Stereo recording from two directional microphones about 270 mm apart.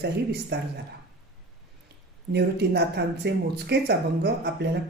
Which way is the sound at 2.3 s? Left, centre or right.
Right.